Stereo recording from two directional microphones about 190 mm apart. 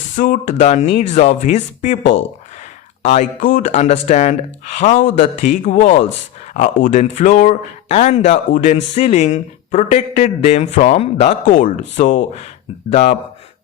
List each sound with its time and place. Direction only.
0.2 s speech: 40° left (ahead or behind)
3.2 s speech: 45° left (ahead or behind)